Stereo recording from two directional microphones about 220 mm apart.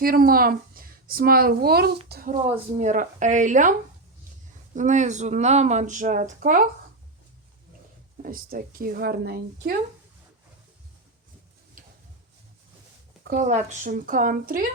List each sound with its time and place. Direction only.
0.0 s a woman's voice: 40° right (ahead or behind)
8.2 s speech: 40° right (ahead or behind)
13.2 s speech: 35° right (ahead or behind)